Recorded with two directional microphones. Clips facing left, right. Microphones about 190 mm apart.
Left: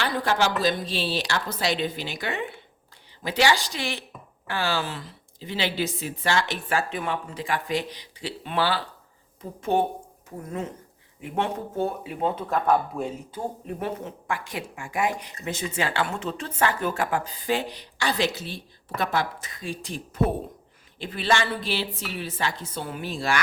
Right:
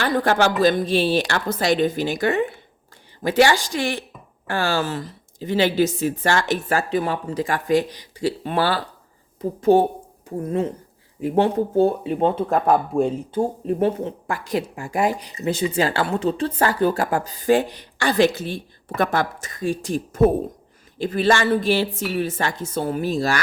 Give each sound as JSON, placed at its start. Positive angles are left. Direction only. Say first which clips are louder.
{"t": 0.0, "sound": "a woman's voice", "louder": "right 5 dB", "side_deg": -55}